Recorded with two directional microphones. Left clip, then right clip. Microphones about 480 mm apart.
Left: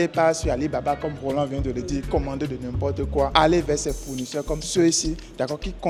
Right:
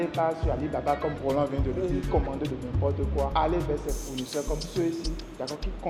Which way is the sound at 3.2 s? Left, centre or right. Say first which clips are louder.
Left 8 dB; left.